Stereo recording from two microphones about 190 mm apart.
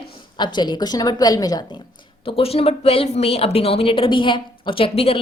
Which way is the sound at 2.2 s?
30° left (ahead or behind).